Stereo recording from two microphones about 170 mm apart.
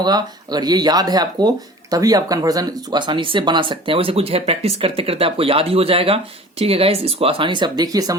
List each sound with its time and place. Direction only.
0.0 s speech: 25° right (ahead or behind)